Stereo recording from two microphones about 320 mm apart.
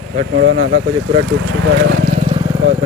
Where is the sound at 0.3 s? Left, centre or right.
Right.